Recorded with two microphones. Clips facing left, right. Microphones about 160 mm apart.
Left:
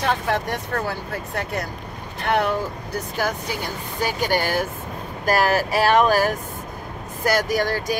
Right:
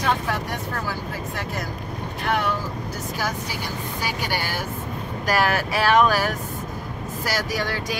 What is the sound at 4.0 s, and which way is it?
Speech, 50° left (ahead or behind).